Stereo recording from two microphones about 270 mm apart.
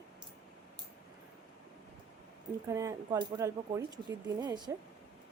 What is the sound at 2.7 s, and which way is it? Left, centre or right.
A woman's voice, centre.